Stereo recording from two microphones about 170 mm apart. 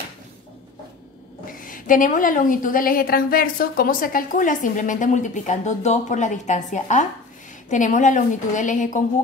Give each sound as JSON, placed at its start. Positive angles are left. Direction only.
{"t": 1.4, "sound": "a woman's voice", "side_deg": 55}